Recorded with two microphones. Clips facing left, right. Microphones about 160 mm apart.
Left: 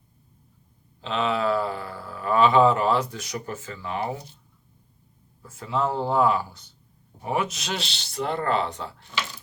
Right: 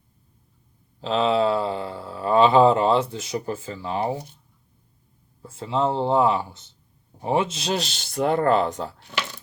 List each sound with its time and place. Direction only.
1.0 s speech: 35° right (ahead or behind)
5.4 s speech: 30° right (ahead or behind); by 8.9 s 45° right (ahead or behind)